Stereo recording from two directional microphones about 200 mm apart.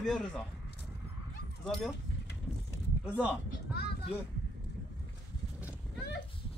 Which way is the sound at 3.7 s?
55° left (ahead or behind).